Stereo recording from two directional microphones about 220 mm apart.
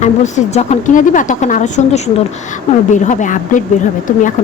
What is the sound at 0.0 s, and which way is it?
A woman's voice, 30° left (ahead or behind).